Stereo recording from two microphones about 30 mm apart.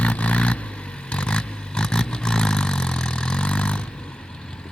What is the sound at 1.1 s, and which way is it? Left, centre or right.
Vehicle, left.